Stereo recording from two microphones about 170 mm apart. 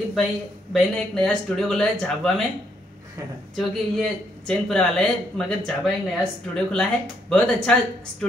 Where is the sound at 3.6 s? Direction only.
Centre (ahead or behind).